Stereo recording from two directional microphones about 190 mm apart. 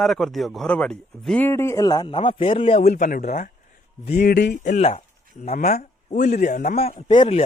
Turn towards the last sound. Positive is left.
turn(degrees=25)  # may be behind; listen again after turning